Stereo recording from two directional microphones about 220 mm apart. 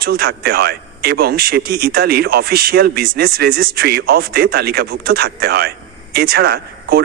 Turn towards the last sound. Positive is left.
turn(degrees=-45)  # may be behind; listen again after turning